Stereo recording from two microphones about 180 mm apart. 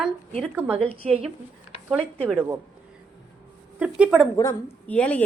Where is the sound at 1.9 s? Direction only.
Centre (ahead or behind).